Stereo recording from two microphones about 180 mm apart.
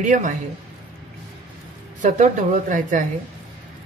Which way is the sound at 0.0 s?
40° right (ahead or behind).